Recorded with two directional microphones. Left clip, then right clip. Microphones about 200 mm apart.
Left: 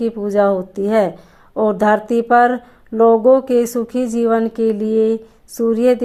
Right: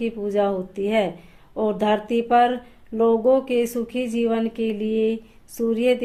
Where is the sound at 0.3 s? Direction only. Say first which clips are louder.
Left 8 dB; 30° left (ahead or behind).